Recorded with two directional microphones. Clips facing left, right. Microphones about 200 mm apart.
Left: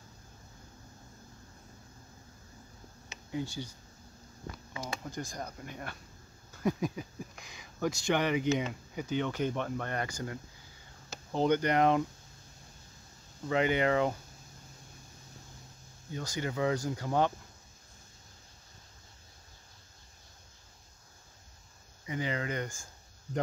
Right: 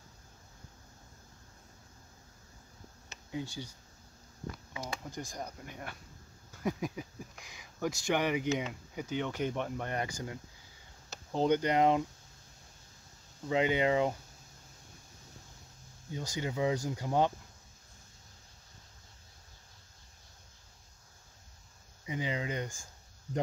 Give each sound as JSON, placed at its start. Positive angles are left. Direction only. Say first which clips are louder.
{"t": 3.3, "sound": "speech", "louder": "left 3 dB", "side_deg": -15}
{"t": 4.7, "sound": "speech", "louder": "left 3 dB", "side_deg": -10}
{"t": 11.4, "sound": "speech", "louder": "even", "side_deg": -15}
{"t": 13.5, "sound": "speech", "louder": "left 1 dB", "side_deg": -15}
{"t": 16.2, "sound": "speech", "louder": "left 1 dB", "side_deg": -15}
{"t": 22.0, "sound": "speech", "louder": "left 1 dB", "side_deg": -15}